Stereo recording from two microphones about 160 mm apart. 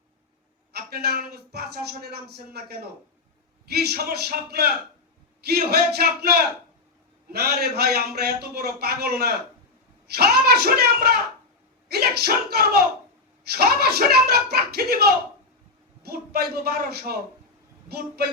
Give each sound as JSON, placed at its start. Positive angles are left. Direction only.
{"t": 0.7, "sound": "speech", "side_deg": -75}